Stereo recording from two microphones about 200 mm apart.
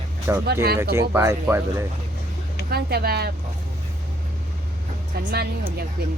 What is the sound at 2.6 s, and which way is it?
Speech, 50° right (ahead or behind).